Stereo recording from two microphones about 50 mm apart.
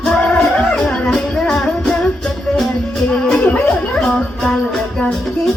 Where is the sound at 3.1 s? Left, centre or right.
Centre.